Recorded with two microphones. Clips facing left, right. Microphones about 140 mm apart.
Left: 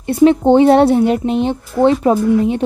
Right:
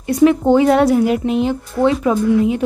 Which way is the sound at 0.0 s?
30° left (ahead or behind).